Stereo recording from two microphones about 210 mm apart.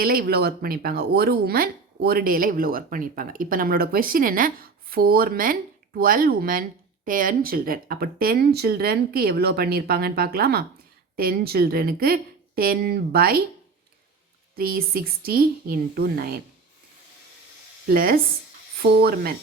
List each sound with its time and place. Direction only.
0.0 s speech: 45° right (ahead or behind)
14.5 s speech: 45° right (ahead or behind)
17.8 s speech: 45° right (ahead or behind)